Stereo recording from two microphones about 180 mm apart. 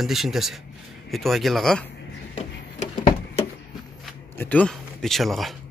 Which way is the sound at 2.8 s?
40° left (ahead or behind).